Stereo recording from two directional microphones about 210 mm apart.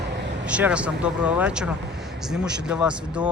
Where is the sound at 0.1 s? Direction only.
55° right (ahead or behind).